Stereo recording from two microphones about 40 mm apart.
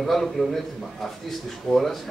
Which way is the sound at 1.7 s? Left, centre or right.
Centre.